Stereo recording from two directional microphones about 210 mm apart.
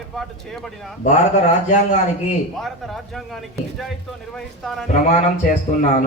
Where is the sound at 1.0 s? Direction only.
35° left (ahead or behind).